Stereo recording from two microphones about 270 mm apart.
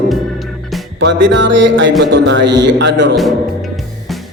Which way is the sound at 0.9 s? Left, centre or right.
Right.